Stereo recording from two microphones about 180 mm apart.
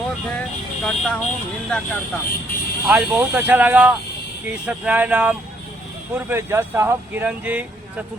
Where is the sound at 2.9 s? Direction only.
5° right (ahead or behind).